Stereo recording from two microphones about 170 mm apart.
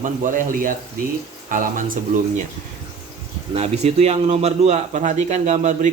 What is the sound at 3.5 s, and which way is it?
Speech, 40° right (ahead or behind).